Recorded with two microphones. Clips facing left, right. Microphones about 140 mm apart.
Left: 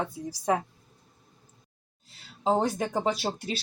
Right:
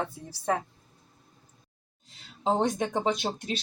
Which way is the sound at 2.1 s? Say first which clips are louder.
Left 2 dB; centre (ahead or behind).